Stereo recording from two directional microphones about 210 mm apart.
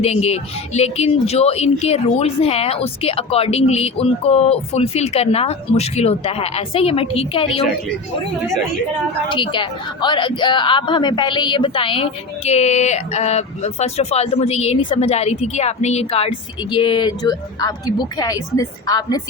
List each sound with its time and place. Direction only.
0.0 s a woman's voice: 30° left (ahead or behind)
9.3 s a woman's voice: 25° left (ahead or behind)